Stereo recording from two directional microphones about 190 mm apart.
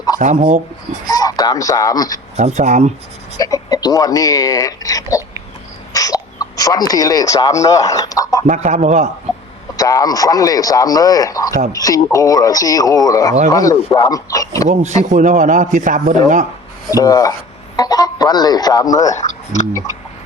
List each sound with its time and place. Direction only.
0.2 s speech: 40° right (ahead or behind)
1.0 s speech: 20° left (ahead or behind)
2.3 s speech: 35° right (ahead or behind)
3.3 s speech: 20° left (ahead or behind)
8.4 s speech: 40° right (ahead or behind)
9.7 s a man's voice: 20° left (ahead or behind)
14.7 s speech: 40° right (ahead or behind)
16.9 s a man's voice: 20° left (ahead or behind)
19.1 s speech: 40° left (ahead or behind)